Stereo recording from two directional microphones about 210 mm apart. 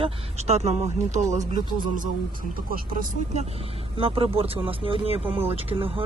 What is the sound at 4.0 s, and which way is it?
Speech, 25° right (ahead or behind).